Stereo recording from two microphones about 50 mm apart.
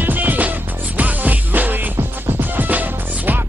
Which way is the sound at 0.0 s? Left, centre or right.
Right.